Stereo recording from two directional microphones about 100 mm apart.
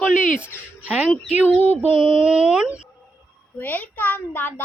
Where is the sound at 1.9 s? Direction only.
10° right (ahead or behind).